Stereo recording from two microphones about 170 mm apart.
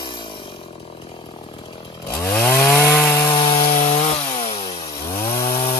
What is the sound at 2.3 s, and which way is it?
Chainsaw, 10° left (ahead or behind).